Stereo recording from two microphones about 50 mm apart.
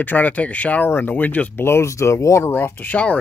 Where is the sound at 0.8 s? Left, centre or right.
Left.